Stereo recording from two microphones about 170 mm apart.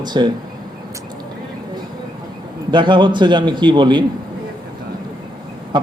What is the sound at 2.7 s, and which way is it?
A man's voice, 25° right (ahead or behind).